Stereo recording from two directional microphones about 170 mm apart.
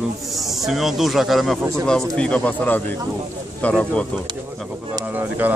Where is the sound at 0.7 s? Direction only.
Centre (ahead or behind).